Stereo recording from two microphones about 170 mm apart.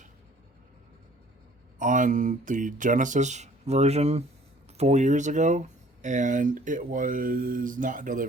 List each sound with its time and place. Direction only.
1.8 s speech: 50° right (ahead or behind)